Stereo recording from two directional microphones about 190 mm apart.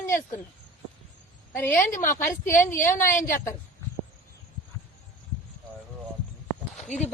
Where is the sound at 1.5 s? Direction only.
10° left (ahead or behind).